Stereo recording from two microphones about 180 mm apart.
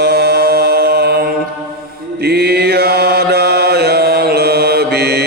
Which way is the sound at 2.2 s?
60° right (ahead or behind).